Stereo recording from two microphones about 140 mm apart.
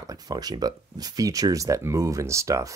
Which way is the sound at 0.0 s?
25° right (ahead or behind).